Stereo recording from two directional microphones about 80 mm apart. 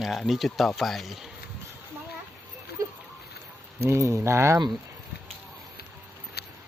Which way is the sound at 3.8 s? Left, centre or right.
Right.